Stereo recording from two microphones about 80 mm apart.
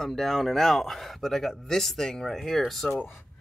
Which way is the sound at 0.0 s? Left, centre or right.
Centre.